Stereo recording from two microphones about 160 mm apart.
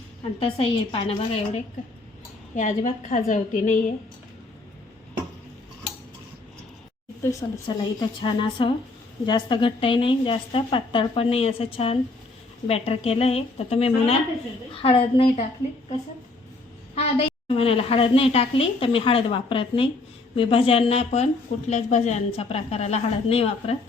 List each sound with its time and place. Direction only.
0.3 s a woman's voice: 35° left (ahead or behind)
2.6 s a woman's voice: 50° left (ahead or behind)
7.2 s a woman's voice: 20° left (ahead or behind); by 15.4 s 35° left (ahead or behind)
16.9 s a woman's voice: 40° left (ahead or behind)